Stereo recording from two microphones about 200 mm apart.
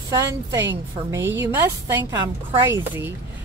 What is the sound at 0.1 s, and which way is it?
Speech, 15° right (ahead or behind).